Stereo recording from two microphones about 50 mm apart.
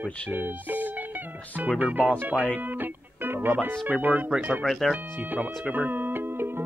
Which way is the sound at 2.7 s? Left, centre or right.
Right.